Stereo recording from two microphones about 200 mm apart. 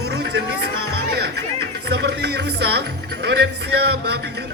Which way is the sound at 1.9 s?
55° right (ahead or behind).